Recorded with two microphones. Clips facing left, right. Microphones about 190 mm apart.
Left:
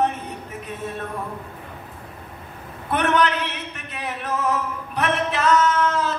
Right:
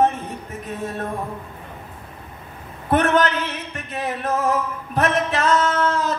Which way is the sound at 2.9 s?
40° right (ahead or behind).